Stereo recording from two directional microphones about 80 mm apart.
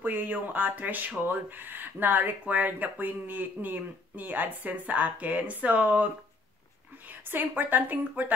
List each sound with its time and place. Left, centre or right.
0.0 s speech: right
7.1 s speech: right